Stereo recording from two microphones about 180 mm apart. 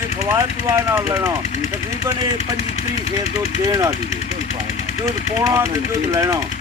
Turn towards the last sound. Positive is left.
turn(degrees=-15)  # may be behind; listen again after turning